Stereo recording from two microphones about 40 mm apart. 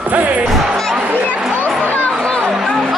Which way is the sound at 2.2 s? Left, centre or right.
Left.